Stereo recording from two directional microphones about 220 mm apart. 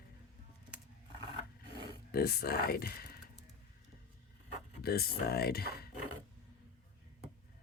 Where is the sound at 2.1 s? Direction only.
45° left (ahead or behind).